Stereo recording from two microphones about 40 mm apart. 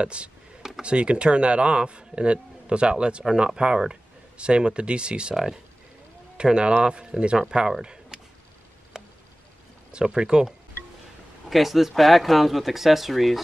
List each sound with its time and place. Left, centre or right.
0.0 s a man's voice: right
0.6 s a sound: centre
0.8 s a man's voice: right
5.3 s speech: centre
6.3 s a man's voice: right
9.0 s a sound: centre
9.8 s a man's voice: right
11.4 s speech: centre